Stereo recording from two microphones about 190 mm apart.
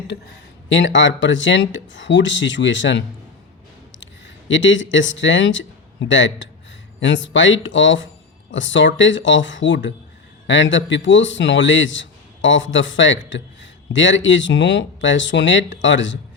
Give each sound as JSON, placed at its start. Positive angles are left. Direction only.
{"t": 0.7, "sound": "a man's voice", "side_deg": 70}
{"t": 4.0, "sound": "a man's voice", "side_deg": 80}